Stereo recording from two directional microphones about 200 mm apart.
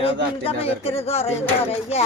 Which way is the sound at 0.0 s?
30° left (ahead or behind).